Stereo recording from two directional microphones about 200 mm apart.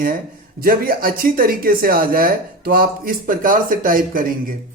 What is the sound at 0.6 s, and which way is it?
Speech, 45° right (ahead or behind).